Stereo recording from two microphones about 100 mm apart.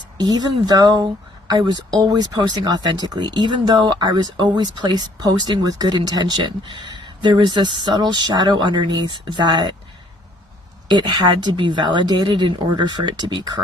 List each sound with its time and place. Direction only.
0.2 s speech: 45° right (ahead or behind)
10.8 s speech: 45° right (ahead or behind)